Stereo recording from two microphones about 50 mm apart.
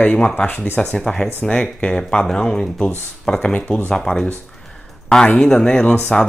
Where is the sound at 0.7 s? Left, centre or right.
Left.